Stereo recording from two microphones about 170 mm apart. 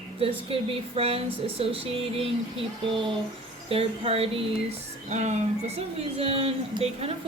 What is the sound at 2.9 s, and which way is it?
Speech, 30° right (ahead or behind).